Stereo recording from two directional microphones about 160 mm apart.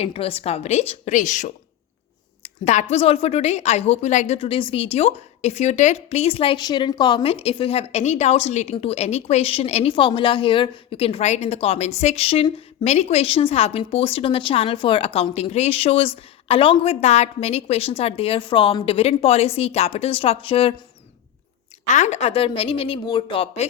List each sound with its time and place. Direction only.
0.0 s a woman's voice: 35° left (ahead or behind)
2.4 s a sound: 45° left (ahead or behind)
2.9 s a woman's voice: 40° left (ahead or behind)
4.4 s a woman's voice: 35° left (ahead or behind)
21.9 s a woman's voice: 45° left (ahead or behind)